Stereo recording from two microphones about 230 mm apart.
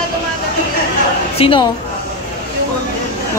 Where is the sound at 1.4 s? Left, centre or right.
Left.